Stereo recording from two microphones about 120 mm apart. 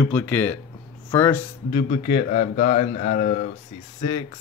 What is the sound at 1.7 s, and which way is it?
A man's voice, 65° left (ahead or behind).